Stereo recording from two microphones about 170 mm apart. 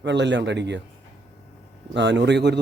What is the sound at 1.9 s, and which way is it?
Speech, 90° right.